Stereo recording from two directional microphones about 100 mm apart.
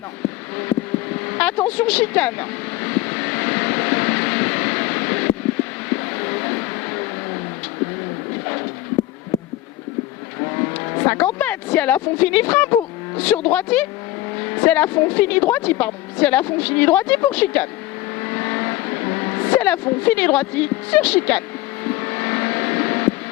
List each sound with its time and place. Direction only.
1.1 s vehicle: 15° left (ahead or behind)
10.9 s speech: 20° left (ahead or behind)
18.2 s vehicle: 20° left (ahead or behind)